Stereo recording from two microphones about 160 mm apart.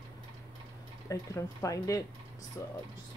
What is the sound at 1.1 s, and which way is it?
A woman's voice, 20° left (ahead or behind).